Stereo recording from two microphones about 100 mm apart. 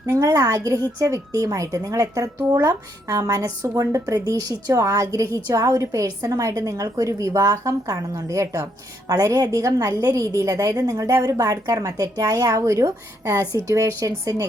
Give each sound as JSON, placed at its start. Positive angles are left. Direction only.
{"t": 0.0, "sound": "a woman's voice", "side_deg": -35}